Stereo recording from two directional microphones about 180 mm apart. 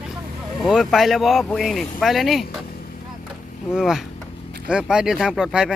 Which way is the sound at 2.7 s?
55° left (ahead or behind).